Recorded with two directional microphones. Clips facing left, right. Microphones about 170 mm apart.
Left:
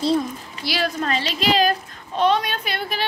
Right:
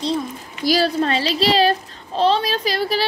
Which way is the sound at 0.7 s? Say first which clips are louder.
Right 6 dB; 35° right (ahead or behind).